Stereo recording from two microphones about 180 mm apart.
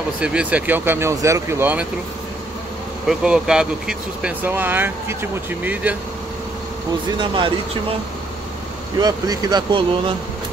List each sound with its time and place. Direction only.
0.2 s speech: 5° right (ahead or behind)
3.1 s speech: 5° right (ahead or behind)
7.2 s speech: 25° right (ahead or behind)
9.0 s speech: 20° right (ahead or behind)